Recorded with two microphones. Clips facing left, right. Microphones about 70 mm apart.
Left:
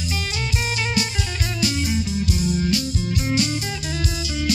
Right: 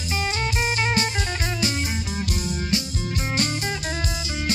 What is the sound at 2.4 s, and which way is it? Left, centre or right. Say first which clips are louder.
Music: left 5 dB; right.